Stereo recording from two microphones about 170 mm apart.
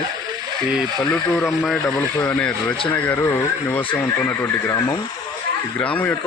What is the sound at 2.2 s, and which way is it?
A man's voice, 10° left (ahead or behind).